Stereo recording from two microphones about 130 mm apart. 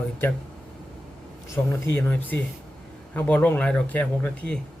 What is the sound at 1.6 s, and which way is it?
Speech, 20° left (ahead or behind).